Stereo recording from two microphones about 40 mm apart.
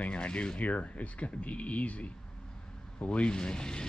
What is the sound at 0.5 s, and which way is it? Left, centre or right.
Speech, left.